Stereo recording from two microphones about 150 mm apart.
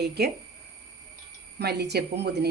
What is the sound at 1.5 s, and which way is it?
Speech, 90° right.